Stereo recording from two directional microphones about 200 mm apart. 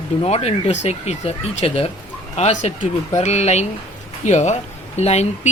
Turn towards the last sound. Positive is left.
turn(degrees=35)  # may be behind; listen again after turning